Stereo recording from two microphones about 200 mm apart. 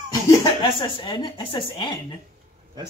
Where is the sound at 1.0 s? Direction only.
25° left (ahead or behind).